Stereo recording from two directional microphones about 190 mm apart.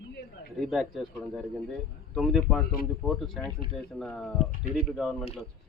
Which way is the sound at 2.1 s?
Centre (ahead or behind).